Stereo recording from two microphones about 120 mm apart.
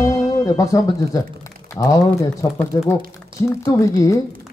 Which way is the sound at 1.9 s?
25° left (ahead or behind).